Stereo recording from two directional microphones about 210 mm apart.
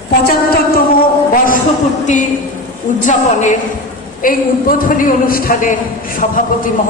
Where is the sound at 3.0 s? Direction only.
35° left (ahead or behind).